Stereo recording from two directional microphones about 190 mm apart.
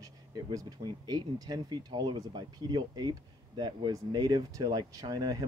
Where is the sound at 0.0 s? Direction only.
20° right (ahead or behind).